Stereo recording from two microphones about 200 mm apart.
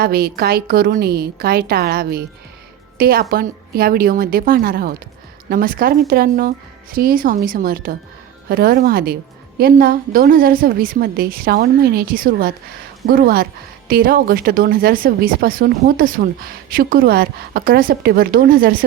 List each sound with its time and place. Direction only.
0.0 s a woman's voice: 50° right (ahead or behind)